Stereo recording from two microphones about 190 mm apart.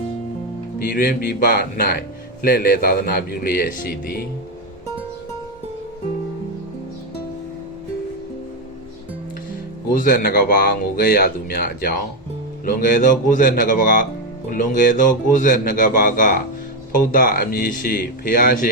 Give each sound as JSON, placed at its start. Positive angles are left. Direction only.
{"t": 0.8, "sound": "speech", "side_deg": 45}
{"t": 9.9, "sound": "speech", "side_deg": 45}